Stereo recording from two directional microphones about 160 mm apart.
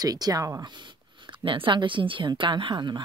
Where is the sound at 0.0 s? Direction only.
25° right (ahead or behind).